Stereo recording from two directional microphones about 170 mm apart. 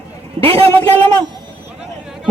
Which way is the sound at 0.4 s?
35° right (ahead or behind).